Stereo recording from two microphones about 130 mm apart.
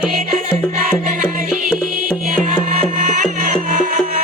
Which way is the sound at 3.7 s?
90° right.